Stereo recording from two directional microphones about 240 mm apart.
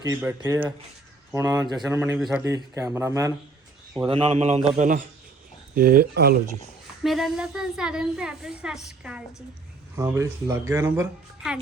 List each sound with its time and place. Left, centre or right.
0.0 s a woman's voice: centre; by 6.3 s right
7.0 s a woman's voice: centre